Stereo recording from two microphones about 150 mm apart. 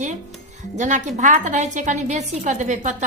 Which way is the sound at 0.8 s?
55° right (ahead or behind).